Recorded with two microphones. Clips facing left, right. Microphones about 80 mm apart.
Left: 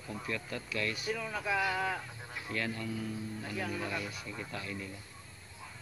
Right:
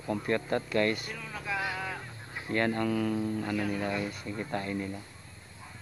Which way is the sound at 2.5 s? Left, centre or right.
Right.